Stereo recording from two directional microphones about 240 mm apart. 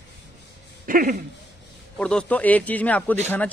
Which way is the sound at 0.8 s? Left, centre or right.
Right.